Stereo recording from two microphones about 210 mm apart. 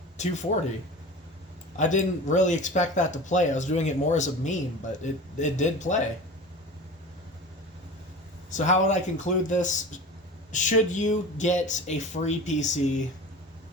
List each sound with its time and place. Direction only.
0.2 s speech: 35° left (ahead or behind)
1.7 s speech: 35° left (ahead or behind)
8.4 s speech: 35° left (ahead or behind)